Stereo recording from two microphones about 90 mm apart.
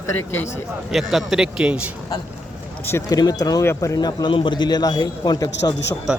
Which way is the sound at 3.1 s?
45° left (ahead or behind).